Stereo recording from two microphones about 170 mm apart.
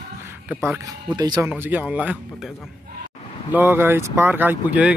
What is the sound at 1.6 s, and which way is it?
Speech, 10° right (ahead or behind).